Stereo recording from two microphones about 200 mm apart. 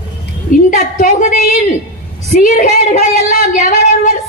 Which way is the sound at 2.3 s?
40° left (ahead or behind).